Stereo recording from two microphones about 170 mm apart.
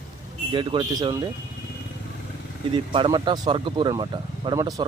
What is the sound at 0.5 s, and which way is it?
Speech, 30° right (ahead or behind).